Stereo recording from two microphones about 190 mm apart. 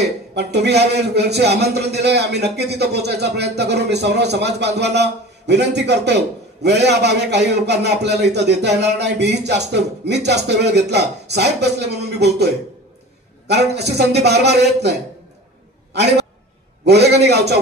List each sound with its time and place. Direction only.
0.0 s a man's voice: 60° right (ahead or behind)
13.5 s a man's voice: 60° right (ahead or behind)
15.9 s a sound: 65° right (ahead or behind)
16.8 s a man's voice: 60° right (ahead or behind)